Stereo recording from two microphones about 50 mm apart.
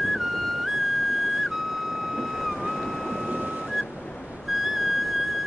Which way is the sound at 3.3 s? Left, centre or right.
Right.